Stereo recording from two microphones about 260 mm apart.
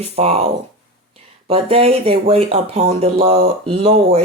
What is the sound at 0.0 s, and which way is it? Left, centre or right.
Speech, right.